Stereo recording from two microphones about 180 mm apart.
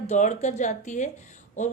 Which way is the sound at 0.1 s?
40° left (ahead or behind).